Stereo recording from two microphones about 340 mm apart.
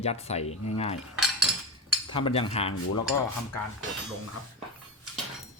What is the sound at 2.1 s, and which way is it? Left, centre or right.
Speech, centre.